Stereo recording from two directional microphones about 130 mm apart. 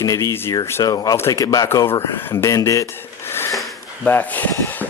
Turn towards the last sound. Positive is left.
turn(degrees=15)  # may be behind; listen again after turning